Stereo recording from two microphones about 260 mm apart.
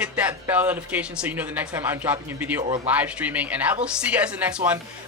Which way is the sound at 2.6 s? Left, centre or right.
Centre.